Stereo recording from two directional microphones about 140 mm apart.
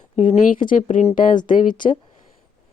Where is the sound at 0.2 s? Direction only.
65° left (ahead or behind).